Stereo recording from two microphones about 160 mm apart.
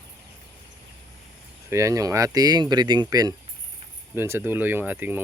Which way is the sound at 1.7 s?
20° right (ahead or behind).